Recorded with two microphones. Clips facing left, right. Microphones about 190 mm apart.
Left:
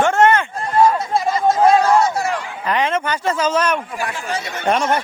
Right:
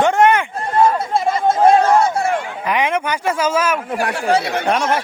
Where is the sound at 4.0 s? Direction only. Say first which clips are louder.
Right 7 dB; 65° right (ahead or behind).